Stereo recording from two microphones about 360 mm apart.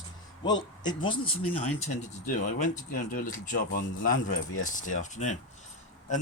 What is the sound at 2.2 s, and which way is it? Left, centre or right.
Speech, left.